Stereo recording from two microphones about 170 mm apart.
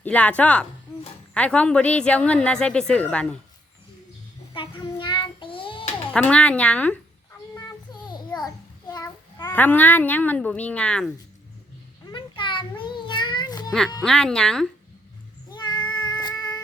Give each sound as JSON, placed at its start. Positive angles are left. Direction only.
{"t": 0.0, "sound": "a woman's voice", "side_deg": 10}
{"t": 4.5, "sound": "child singing", "side_deg": 30}
{"t": 6.1, "sound": "a woman's voice", "side_deg": 5}
{"t": 7.9, "sound": "a sound", "side_deg": 25}
{"t": 8.4, "sound": "babbling", "side_deg": 20}
{"t": 9.5, "sound": "a woman's voice", "side_deg": 10}
{"t": 12.1, "sound": "a sound", "side_deg": 30}
{"t": 14.0, "sound": "speech", "side_deg": 5}
{"t": 15.6, "sound": "cat", "side_deg": 25}
{"t": 16.2, "sound": "a sound", "side_deg": 25}